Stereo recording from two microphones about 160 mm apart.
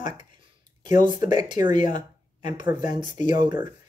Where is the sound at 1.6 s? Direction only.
50° left (ahead or behind).